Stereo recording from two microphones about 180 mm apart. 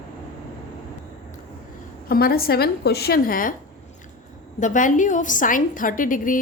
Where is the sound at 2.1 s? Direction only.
55° left (ahead or behind).